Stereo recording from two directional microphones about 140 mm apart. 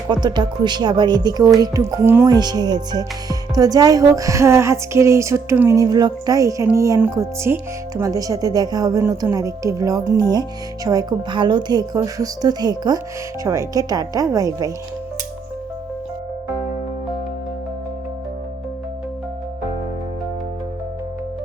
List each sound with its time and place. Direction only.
0.1 s speech: 30° right (ahead or behind)
2.3 s speech: 30° right (ahead or behind)